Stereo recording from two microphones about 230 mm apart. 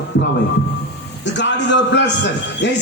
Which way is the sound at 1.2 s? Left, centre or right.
Left.